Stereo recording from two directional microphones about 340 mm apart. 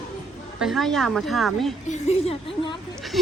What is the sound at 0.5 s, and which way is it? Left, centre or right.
Speech, centre.